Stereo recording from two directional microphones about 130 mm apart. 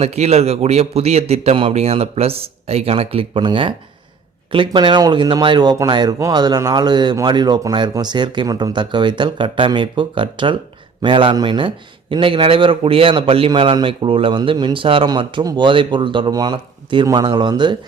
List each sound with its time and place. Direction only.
0.0 s a man's voice: 55° right (ahead or behind); by 17.7 s 35° right (ahead or behind)